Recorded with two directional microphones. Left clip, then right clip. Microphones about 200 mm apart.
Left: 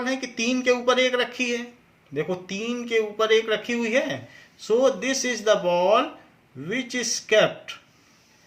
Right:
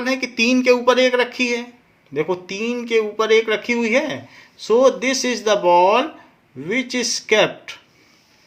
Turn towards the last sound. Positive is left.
turn(degrees=-40)  # may be behind; listen again after turning